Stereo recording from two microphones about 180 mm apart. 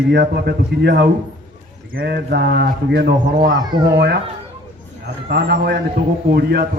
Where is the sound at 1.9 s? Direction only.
60° right (ahead or behind).